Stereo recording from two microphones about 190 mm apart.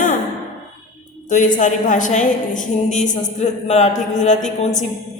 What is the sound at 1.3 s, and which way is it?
A man's voice, 40° left (ahead or behind).